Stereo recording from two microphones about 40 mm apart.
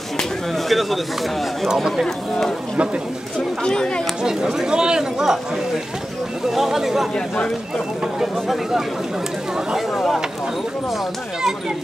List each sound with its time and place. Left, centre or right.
0.7 s speech: centre
3.6 s speech: centre
4.2 s speech: centre
6.5 s speech: centre
9.8 s speech: centre